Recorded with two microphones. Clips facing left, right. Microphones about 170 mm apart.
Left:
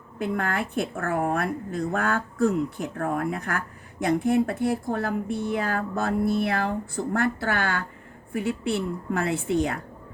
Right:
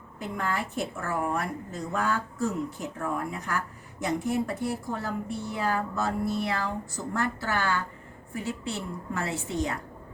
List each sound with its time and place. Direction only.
0.2 s a woman's voice: 60° left (ahead or behind)